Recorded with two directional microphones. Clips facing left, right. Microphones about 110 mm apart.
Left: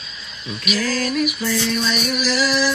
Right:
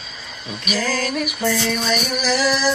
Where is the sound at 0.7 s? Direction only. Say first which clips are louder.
Left 1 dB; 40° right (ahead or behind).